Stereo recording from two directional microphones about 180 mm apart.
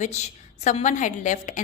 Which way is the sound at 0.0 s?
40° left (ahead or behind).